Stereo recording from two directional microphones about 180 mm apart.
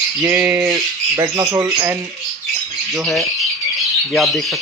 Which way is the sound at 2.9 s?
Centre (ahead or behind).